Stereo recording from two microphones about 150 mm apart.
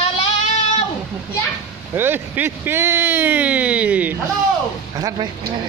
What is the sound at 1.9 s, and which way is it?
Speech, 15° right (ahead or behind).